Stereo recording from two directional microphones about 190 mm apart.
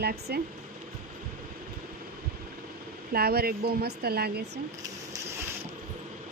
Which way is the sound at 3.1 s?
55° right (ahead or behind).